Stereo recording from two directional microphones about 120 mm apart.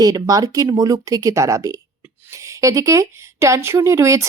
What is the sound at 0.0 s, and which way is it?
Speech, 30° right (ahead or behind).